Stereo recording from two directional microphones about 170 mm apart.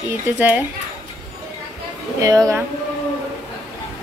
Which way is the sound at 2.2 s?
20° right (ahead or behind).